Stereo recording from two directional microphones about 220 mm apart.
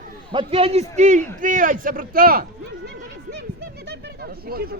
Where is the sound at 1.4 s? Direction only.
35° right (ahead or behind).